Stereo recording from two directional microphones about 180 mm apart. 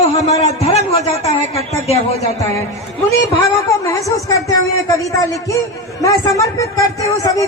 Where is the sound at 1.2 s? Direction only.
35° left (ahead or behind).